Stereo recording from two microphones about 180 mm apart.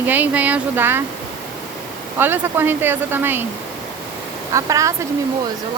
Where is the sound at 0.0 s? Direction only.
10° right (ahead or behind).